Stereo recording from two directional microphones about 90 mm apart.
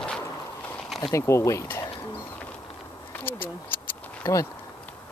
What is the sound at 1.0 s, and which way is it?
Speech, 35° left (ahead or behind).